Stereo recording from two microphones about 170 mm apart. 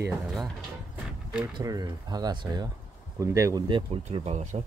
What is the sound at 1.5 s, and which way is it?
Speech, 20° right (ahead or behind).